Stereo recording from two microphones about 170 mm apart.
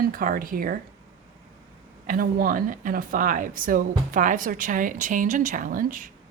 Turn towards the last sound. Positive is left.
turn(degrees=-55)  # may be behind; listen again after turning